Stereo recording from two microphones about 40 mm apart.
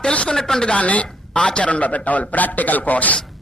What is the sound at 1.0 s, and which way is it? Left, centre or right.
A man's voice, centre.